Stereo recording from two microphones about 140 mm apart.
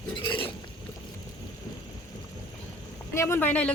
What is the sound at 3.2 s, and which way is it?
Speech, 20° left (ahead or behind).